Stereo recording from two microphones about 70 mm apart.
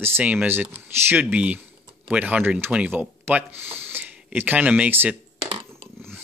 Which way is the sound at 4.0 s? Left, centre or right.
Right.